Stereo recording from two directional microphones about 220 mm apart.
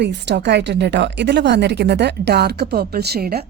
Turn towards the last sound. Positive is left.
turn(degrees=-45)  # may be behind; listen again after turning